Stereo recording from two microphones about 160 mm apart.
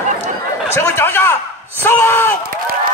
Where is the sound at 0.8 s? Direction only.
15° left (ahead or behind).